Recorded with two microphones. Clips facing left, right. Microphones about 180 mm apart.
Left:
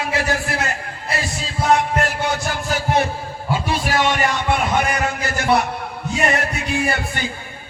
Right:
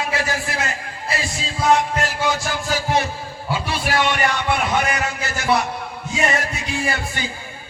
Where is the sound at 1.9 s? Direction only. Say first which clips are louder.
Left 1 dB; 60° left (ahead or behind).